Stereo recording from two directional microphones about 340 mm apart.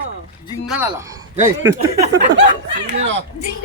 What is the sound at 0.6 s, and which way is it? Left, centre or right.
Speech, centre.